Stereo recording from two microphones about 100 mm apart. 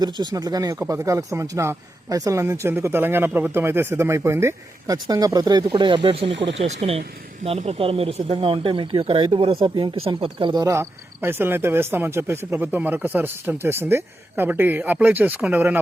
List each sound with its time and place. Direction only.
0.0 s speech: 45° right (ahead or behind); by 10.5 s 60° right (ahead or behind)
10.5 s speech: 35° right (ahead or behind); by 15.8 s 20° right (ahead or behind)